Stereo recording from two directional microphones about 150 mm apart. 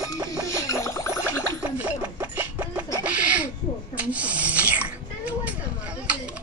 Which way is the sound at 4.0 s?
10° right (ahead or behind).